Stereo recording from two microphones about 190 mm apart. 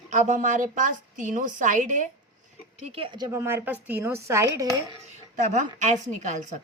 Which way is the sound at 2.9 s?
30° right (ahead or behind).